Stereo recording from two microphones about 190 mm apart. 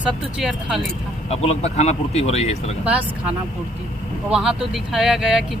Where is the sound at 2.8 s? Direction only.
5° right (ahead or behind).